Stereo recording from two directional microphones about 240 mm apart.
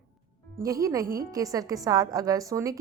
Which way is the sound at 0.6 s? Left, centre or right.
Centre.